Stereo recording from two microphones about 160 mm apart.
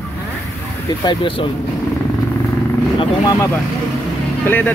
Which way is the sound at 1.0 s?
30° left (ahead or behind).